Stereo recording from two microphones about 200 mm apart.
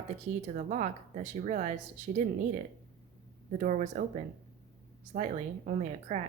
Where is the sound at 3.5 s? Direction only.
40° right (ahead or behind).